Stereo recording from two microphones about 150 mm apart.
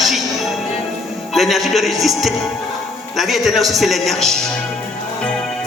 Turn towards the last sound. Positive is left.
turn(degrees=0)  # may be behind; listen again after turning